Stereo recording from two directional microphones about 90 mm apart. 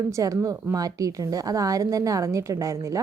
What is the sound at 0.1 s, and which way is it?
A woman's voice, 40° right (ahead or behind).